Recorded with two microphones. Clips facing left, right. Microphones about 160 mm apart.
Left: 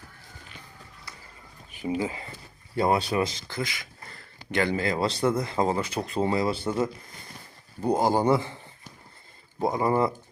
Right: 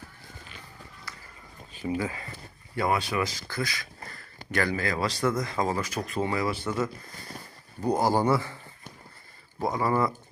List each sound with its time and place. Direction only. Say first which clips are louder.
1.7 s speech: left 1 dB; 20° left (ahead or behind)
9.6 s speech: left 2 dB; 25° left (ahead or behind)